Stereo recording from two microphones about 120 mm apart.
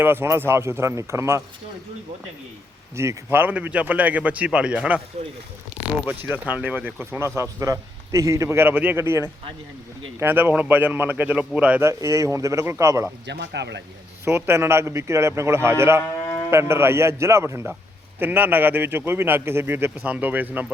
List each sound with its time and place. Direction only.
0.0 s a man's voice: 20° right (ahead or behind)
2.9 s speech: 25° right (ahead or behind)
5.2 s speech: 60° right (ahead or behind)
6.1 s a man's voice: 15° right (ahead or behind)
11.8 s a man's voice: 25° right (ahead or behind)
14.3 s a man's voice: 20° right (ahead or behind)